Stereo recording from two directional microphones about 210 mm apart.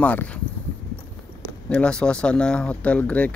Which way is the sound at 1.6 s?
5° left (ahead or behind).